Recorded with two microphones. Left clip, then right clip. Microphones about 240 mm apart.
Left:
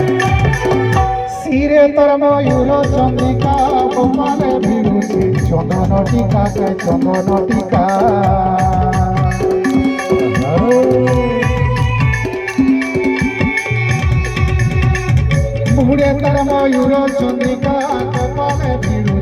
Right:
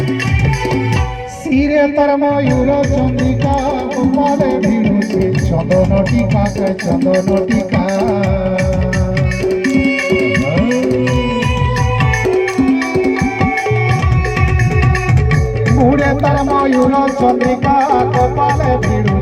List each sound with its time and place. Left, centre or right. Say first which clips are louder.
1.5 s a sound: left 2 dB; left
3.7 s music: left 3 dB; left
12.5 s music: right 1 dB; right
16.3 s music: even; left